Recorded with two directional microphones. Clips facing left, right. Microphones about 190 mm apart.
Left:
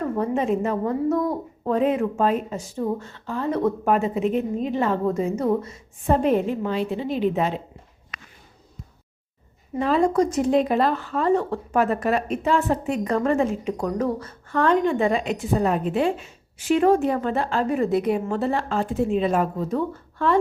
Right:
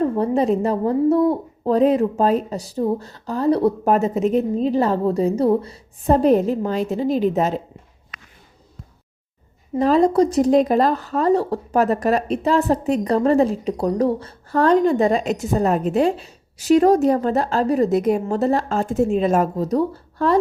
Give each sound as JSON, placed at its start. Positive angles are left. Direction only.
{"t": 0.0, "sound": "a woman's voice", "side_deg": -35}
{"t": 9.7, "sound": "a woman's voice", "side_deg": -35}